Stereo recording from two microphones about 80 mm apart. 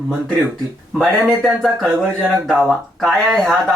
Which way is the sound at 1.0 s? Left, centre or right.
Centre.